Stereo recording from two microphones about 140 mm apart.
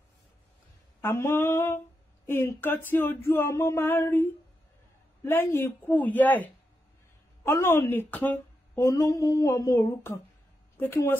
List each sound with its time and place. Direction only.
1.0 s speech: 20° left (ahead or behind)
8.7 s a sound: 25° left (ahead or behind)
10.8 s speech: 15° left (ahead or behind)